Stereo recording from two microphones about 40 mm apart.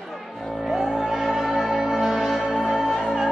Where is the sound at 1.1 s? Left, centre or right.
Centre.